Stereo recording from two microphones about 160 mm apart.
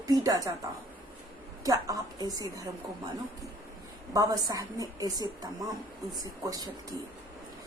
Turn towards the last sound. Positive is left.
turn(degrees=-25)  # may be behind; listen again after turning